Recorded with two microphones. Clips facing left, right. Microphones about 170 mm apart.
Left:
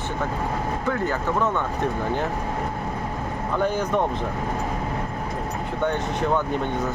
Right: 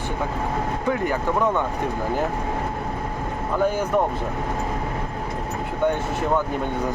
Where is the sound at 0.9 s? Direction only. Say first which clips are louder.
Right 2 dB; 15° right (ahead or behind).